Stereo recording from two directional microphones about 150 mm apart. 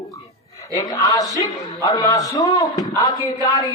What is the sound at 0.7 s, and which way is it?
Speech, 25° left (ahead or behind).